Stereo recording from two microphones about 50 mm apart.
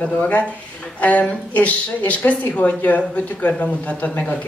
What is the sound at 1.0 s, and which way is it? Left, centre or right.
A woman's voice, left.